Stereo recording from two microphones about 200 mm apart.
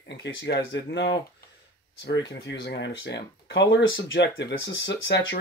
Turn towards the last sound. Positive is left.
turn(degrees=60)  # may be behind; listen again after turning